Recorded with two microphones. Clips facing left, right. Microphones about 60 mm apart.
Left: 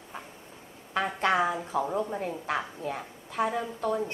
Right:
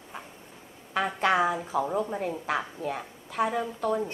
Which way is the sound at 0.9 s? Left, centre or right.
Centre.